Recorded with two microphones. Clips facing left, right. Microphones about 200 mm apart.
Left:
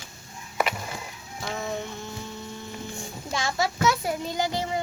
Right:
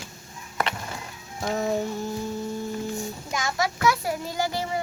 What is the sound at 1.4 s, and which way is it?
Child singing, 35° right (ahead or behind).